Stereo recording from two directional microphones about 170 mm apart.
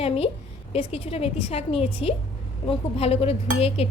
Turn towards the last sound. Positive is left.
turn(degrees=35)  # may be behind; listen again after turning